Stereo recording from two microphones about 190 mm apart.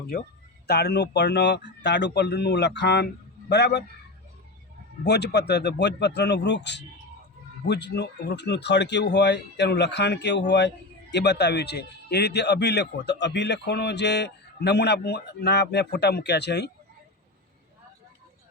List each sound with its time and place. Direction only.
0.7 s a man's voice: 60° left (ahead or behind)
5.0 s a man's voice: 60° left (ahead or behind)